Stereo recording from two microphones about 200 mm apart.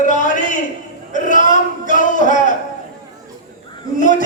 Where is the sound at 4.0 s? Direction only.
40° left (ahead or behind).